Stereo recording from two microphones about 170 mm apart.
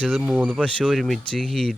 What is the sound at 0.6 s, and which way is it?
Speech, 5° left (ahead or behind).